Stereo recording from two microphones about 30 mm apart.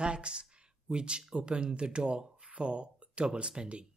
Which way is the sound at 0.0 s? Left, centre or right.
Right.